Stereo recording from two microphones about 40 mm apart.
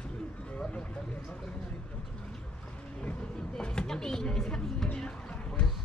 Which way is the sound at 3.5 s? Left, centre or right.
Centre.